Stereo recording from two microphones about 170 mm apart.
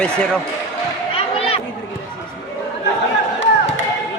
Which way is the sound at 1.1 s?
35° left (ahead or behind).